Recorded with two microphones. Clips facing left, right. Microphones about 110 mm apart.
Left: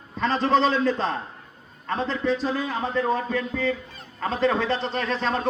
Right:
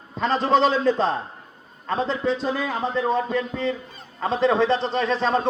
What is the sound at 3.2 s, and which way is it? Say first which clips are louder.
Speech: right 1 dB; 20° right (ahead or behind).